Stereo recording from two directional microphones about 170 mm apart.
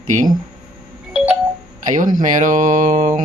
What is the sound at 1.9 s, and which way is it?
Speech, 50° right (ahead or behind).